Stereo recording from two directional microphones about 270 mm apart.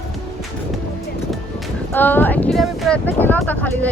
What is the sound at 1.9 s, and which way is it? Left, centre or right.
Speech, centre.